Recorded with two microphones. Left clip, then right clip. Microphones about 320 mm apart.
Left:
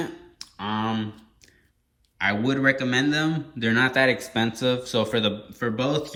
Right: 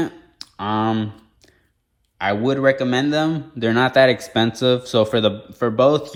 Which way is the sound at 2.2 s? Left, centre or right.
Centre.